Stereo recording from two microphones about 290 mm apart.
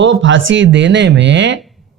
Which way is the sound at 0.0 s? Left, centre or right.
Right.